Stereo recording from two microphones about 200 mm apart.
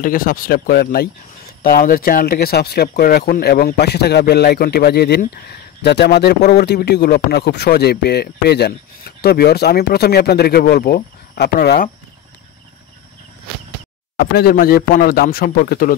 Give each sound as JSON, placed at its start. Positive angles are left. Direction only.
{"t": 0.0, "sound": "speech", "side_deg": 45}
{"t": 14.1, "sound": "speech", "side_deg": 50}